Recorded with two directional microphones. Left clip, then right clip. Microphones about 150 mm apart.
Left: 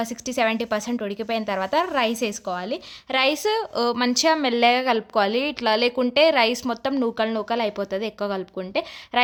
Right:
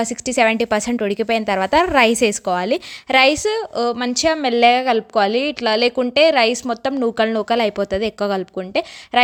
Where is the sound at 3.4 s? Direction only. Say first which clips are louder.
Right 3 dB; 20° right (ahead or behind).